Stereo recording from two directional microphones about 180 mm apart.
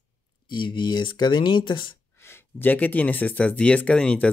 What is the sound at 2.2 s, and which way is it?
Speech, 15° left (ahead or behind).